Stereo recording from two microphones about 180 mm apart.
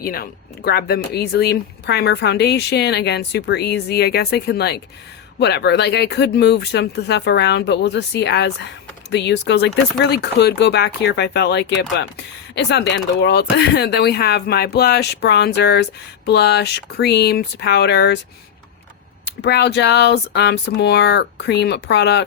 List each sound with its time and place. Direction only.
0.0 s speech: 55° left (ahead or behind)
19.2 s speech: 70° left (ahead or behind)